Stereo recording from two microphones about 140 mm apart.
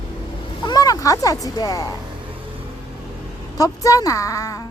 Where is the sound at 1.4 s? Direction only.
25° left (ahead or behind).